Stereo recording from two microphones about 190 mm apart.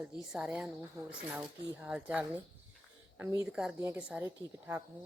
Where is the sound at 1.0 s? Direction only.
15° right (ahead or behind).